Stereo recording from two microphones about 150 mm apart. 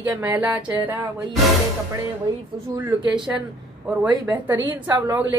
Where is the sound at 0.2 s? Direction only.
15° right (ahead or behind).